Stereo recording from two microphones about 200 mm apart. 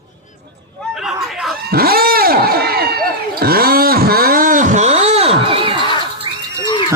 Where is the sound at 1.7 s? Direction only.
50° right (ahead or behind); by 5.8 s 25° right (ahead or behind).